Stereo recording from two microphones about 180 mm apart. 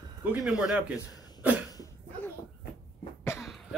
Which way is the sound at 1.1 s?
20° left (ahead or behind).